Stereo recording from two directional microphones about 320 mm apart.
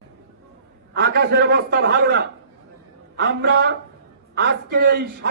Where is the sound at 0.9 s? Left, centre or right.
Right.